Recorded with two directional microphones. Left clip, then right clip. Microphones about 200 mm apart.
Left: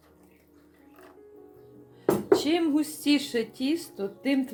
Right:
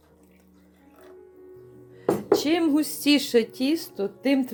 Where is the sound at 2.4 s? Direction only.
50° right (ahead or behind).